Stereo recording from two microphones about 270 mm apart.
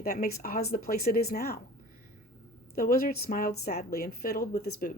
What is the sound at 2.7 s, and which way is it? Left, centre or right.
A woman's voice, left.